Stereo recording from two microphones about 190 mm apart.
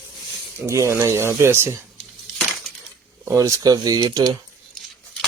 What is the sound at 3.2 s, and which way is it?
Speech, 15° right (ahead or behind).